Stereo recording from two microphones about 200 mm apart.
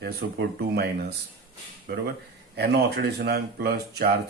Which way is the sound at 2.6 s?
55° right (ahead or behind).